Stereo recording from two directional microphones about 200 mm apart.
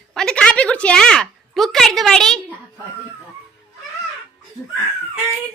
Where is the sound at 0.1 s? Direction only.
5° left (ahead or behind).